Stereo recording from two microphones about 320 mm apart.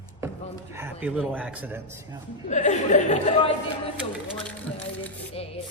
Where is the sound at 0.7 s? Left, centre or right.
Centre.